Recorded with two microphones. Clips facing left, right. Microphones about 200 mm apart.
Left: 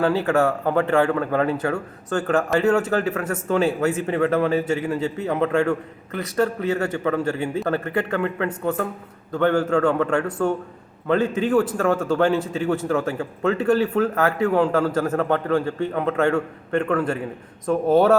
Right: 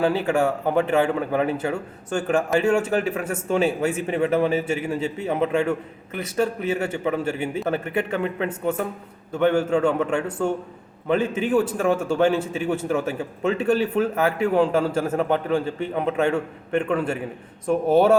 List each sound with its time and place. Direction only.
0.0 s a man's voice: 15° right (ahead or behind)